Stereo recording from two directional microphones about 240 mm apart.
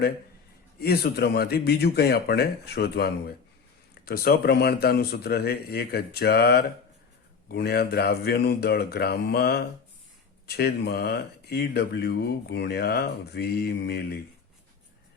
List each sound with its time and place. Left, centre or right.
0.8 s speech: left